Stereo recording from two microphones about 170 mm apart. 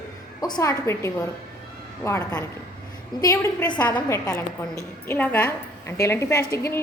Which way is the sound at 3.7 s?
25° left (ahead or behind).